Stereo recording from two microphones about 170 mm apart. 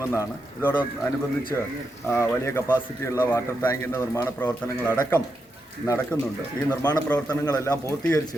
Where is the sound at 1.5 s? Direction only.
15° left (ahead or behind).